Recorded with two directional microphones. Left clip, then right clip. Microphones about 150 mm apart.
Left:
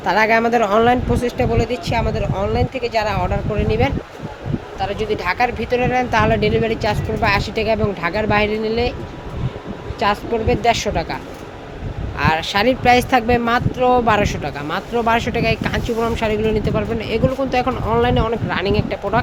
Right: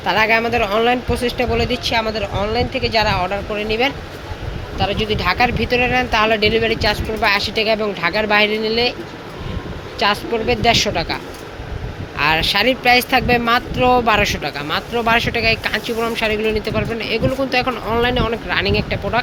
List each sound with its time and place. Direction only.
0.0 s speech: 25° left (ahead or behind)
1.2 s speech: 15° left (ahead or behind)
10.0 s speech: 15° left (ahead or behind)